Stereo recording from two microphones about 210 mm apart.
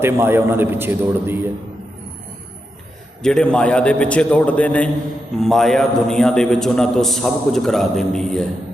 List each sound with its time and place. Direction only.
0.0 s a man's voice: 10° right (ahead or behind)
3.2 s a man's voice: 5° left (ahead or behind)